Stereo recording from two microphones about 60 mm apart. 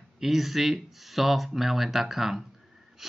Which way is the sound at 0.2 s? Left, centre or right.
Centre.